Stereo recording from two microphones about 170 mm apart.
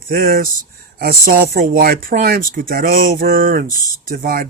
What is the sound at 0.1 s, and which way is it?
Speech, 60° right (ahead or behind).